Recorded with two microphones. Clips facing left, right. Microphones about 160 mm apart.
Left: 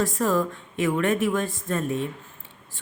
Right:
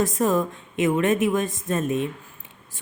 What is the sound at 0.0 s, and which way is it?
A woman's voice, 20° right (ahead or behind).